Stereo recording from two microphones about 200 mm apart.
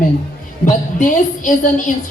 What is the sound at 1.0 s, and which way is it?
Speech, 40° left (ahead or behind).